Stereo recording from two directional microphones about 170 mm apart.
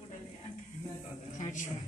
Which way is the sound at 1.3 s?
45° left (ahead or behind).